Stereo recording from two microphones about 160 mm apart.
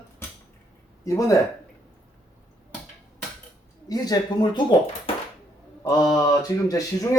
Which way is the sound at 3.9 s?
25° left (ahead or behind).